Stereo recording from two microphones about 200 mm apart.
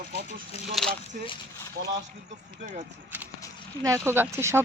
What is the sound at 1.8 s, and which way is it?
Speech, 55° right (ahead or behind).